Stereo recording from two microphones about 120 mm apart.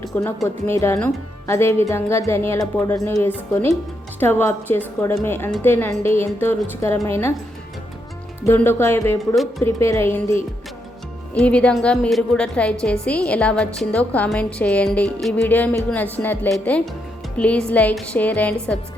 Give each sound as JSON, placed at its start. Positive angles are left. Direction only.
{"t": 0.4, "sound": "a woman's voice", "side_deg": 20}
{"t": 8.4, "sound": "a woman's voice", "side_deg": 20}
{"t": 9.3, "sound": "a woman's voice", "side_deg": 0}
{"t": 9.6, "sound": "a woman's voice", "side_deg": 20}